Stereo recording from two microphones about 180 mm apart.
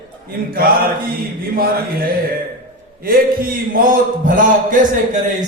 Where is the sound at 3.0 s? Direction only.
55° right (ahead or behind).